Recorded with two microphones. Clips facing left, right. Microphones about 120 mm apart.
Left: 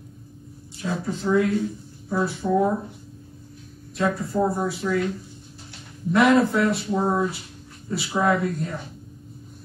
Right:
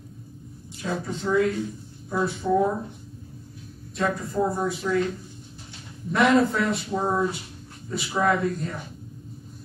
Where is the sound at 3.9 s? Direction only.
Centre (ahead or behind).